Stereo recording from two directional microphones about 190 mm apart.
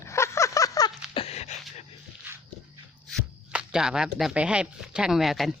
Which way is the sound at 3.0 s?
Centre (ahead or behind).